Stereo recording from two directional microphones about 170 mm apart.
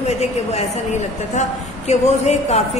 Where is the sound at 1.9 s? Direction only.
40° left (ahead or behind).